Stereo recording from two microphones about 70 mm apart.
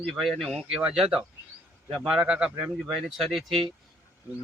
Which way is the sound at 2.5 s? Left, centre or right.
Right.